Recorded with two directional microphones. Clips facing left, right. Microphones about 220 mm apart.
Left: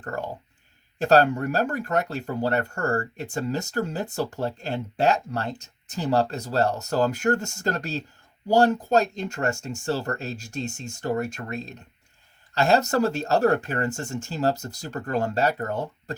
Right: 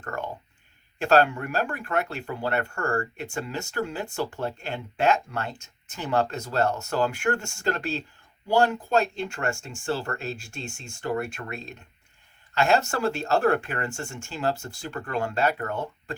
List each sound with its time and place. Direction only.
0.0 s speech: 35° left (ahead or behind)